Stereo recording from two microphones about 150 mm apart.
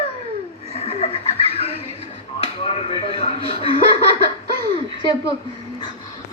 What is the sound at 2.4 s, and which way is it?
Chuckle, 40° left (ahead or behind).